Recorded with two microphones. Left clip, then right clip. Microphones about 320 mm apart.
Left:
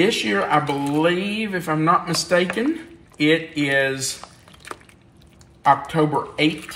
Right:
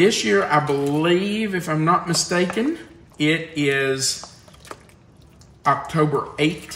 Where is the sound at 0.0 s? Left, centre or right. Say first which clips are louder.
Right 2 dB; centre.